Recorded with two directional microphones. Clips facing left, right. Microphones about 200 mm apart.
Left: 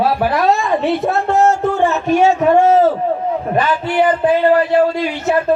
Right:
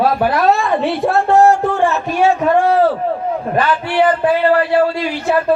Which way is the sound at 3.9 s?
15° left (ahead or behind).